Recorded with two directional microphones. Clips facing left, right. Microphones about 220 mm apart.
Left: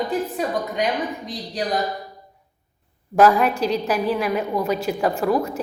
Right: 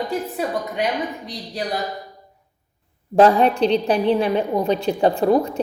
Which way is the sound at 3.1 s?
30° right (ahead or behind).